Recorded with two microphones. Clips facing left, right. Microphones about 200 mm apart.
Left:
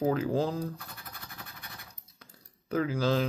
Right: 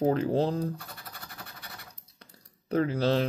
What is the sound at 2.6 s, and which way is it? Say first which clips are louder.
Speech: right 2 dB; 35° right (ahead or behind).